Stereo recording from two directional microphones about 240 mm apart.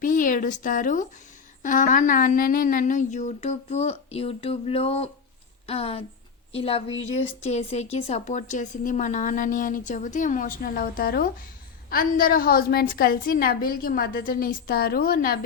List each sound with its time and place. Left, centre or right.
0.0 s speech: left